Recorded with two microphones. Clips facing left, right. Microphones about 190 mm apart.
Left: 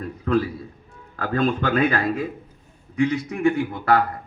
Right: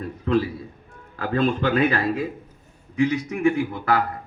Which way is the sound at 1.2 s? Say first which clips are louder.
Even; 30° right (ahead or behind).